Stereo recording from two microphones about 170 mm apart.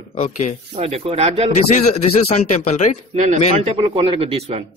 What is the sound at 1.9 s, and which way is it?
Speech, 35° left (ahead or behind).